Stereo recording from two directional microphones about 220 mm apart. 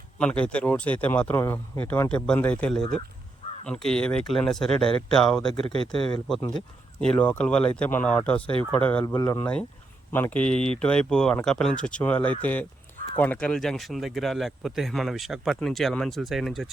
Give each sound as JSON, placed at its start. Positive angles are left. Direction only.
{"t": 0.2, "sound": "speech", "side_deg": 5}
{"t": 5.6, "sound": "speech", "side_deg": -25}
{"t": 5.9, "sound": "speech", "side_deg": 20}
{"t": 7.0, "sound": "speech", "side_deg": 5}